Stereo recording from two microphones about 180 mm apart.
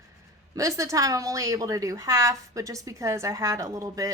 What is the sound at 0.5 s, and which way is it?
A woman's voice, 15° right (ahead or behind).